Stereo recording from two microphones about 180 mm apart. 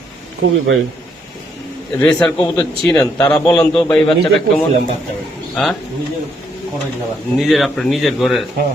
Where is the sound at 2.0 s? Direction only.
5° left (ahead or behind).